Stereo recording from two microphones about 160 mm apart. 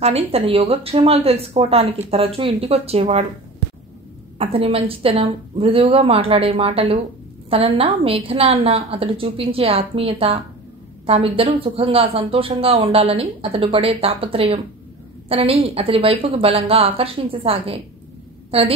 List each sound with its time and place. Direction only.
0.0 s speech: 40° right (ahead or behind)
4.4 s speech: 35° right (ahead or behind)